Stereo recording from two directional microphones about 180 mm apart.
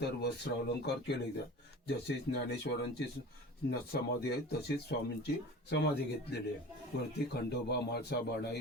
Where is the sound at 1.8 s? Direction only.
65° left (ahead or behind).